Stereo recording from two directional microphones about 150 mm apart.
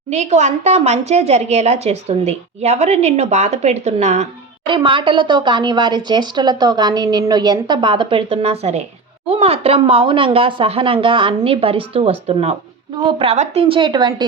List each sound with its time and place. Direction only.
0.1 s speech: 50° right (ahead or behind)
4.6 s speech: 35° right (ahead or behind)